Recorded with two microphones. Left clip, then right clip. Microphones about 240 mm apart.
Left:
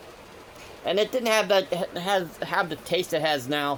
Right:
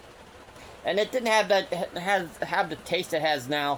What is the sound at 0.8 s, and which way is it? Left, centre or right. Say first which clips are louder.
Speech: left 2 dB; left.